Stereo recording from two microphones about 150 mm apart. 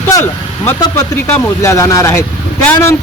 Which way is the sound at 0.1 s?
20° left (ahead or behind).